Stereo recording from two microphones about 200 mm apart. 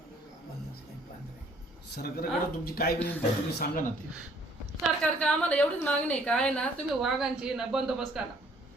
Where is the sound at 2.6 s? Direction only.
50° left (ahead or behind).